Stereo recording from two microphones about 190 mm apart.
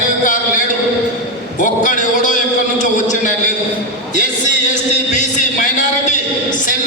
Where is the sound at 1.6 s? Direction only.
40° left (ahead or behind).